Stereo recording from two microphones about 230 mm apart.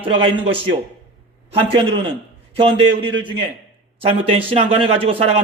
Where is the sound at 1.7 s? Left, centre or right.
Right.